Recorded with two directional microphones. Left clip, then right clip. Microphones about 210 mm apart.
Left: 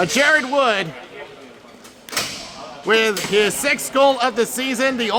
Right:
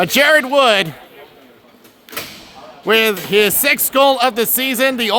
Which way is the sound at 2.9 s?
45° right (ahead or behind).